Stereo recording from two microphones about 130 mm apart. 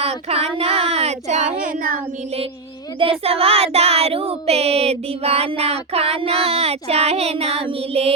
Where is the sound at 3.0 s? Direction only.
45° right (ahead or behind).